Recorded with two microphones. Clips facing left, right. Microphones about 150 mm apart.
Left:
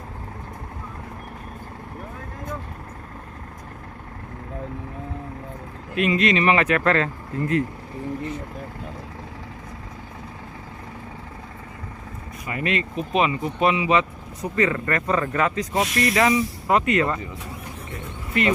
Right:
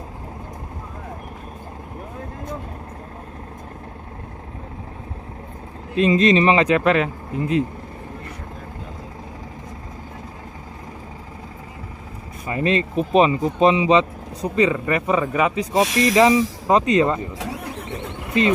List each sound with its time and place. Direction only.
5.9 s speech: 25° right (ahead or behind)
6.6 s speech: 15° right (ahead or behind)
12.4 s speech: 30° right (ahead or behind)
16.1 s speech: 25° right (ahead or behind)
17.4 s vehicle: 85° right